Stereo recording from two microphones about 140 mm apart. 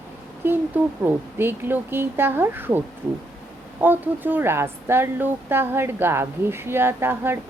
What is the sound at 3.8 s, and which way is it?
A woman's voice, 15° right (ahead or behind).